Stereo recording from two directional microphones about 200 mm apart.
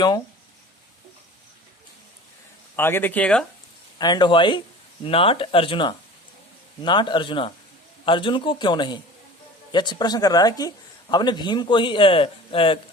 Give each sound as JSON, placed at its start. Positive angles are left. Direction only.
{"t": 2.7, "sound": "speech", "side_deg": 10}
{"t": 3.9, "sound": "speech", "side_deg": 20}